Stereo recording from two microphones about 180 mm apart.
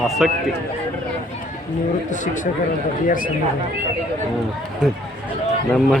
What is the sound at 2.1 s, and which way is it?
Speech, 45° left (ahead or behind).